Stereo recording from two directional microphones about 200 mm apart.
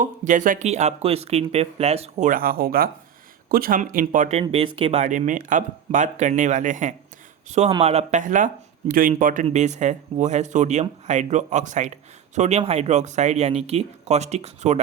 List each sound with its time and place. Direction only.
0.0 s speech: 40° right (ahead or behind)